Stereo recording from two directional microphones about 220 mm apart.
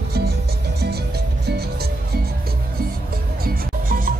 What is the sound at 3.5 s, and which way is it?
Music, 40° right (ahead or behind).